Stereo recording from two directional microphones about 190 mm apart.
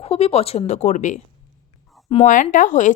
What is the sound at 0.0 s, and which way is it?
A woman's voice, 30° left (ahead or behind).